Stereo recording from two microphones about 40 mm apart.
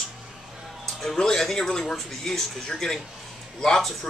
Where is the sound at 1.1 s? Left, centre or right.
Centre.